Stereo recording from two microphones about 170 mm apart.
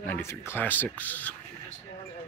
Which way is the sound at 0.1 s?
15° left (ahead or behind).